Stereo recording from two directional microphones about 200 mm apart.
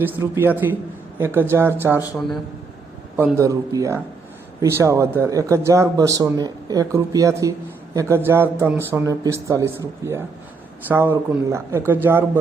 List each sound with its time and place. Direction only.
0.0 s a man's voice: 10° right (ahead or behind)
3.2 s a man's voice: 10° right (ahead or behind)